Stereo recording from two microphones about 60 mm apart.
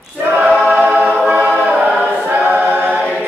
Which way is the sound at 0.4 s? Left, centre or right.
Right.